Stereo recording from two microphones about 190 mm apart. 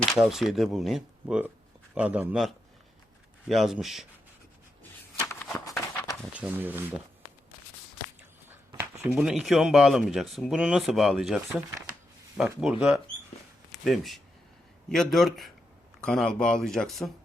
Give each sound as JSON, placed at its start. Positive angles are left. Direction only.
{"t": 0.1, "sound": "speech", "side_deg": 0}
{"t": 3.5, "sound": "speech", "side_deg": 0}
{"t": 5.3, "sound": "a sound", "side_deg": 15}
{"t": 6.2, "sound": "speech", "side_deg": -5}
{"t": 8.4, "sound": "speech", "side_deg": -15}